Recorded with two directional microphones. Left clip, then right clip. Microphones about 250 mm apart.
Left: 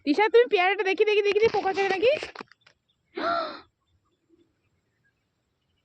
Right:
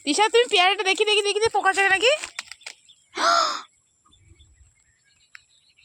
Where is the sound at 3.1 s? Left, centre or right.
Centre.